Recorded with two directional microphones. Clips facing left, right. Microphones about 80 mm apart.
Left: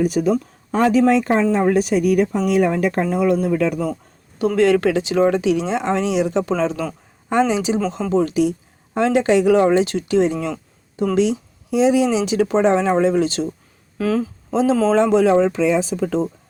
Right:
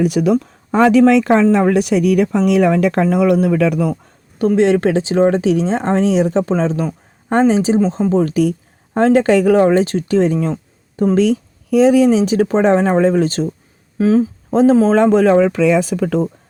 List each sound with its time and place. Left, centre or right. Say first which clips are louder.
0.0 s speech: right 3 dB; right
4.4 s speech: right 3 dB; right
14.0 s speech: right 7 dB; right
14.5 s speech: right 5 dB; right